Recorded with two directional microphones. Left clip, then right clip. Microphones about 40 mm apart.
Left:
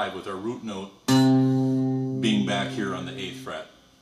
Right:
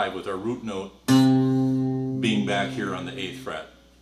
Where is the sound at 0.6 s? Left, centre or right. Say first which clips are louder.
Right 3 dB; centre.